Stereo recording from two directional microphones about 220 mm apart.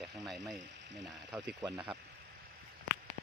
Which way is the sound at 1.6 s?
20° right (ahead or behind).